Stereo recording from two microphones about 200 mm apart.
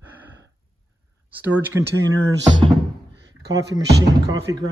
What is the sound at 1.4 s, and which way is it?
Speech, 10° right (ahead or behind).